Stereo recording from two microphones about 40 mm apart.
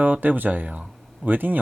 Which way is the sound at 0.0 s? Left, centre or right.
Right.